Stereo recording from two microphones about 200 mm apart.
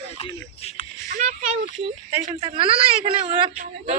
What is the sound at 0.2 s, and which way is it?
Speech, 30° left (ahead or behind).